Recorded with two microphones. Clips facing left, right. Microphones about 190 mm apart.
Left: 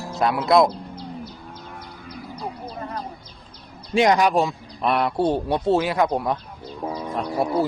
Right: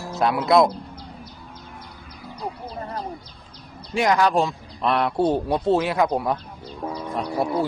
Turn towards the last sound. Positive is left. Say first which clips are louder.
# left 1 dB
turn(degrees=0)  # may be behind; listen again after turning